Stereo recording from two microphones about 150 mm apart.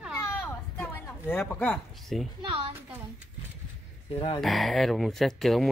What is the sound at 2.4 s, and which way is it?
Speech, 40° right (ahead or behind).